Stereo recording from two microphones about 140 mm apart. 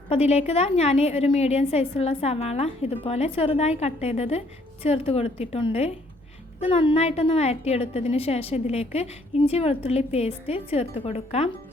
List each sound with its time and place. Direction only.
0.1 s a woman's voice: 50° left (ahead or behind)